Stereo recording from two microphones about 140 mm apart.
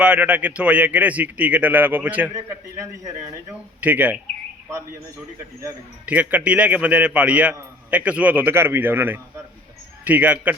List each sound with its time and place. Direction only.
0.0 s a man's voice: 10° right (ahead or behind)
2.3 s a man's voice: 20° right (ahead or behind)
3.8 s a man's voice: 10° right (ahead or behind)
6.1 s a man's voice: 10° right (ahead or behind)